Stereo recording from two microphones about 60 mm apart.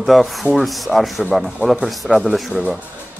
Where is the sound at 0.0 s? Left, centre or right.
Centre.